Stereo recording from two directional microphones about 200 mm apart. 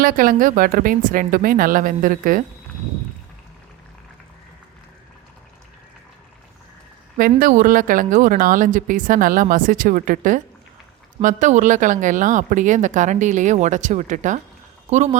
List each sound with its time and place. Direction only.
0.0 s speech: 45° right (ahead or behind)
7.2 s speech: 45° right (ahead or behind)